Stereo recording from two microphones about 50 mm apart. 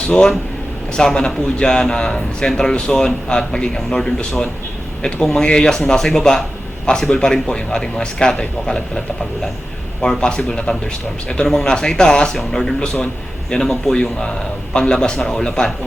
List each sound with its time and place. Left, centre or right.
0.1 s a man's voice: centre